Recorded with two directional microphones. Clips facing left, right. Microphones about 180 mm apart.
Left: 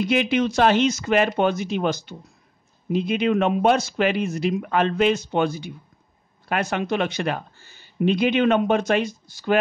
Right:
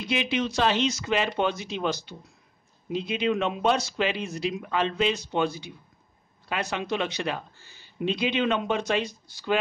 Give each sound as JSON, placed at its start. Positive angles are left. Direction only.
{"t": 0.0, "sound": "speech", "side_deg": 50}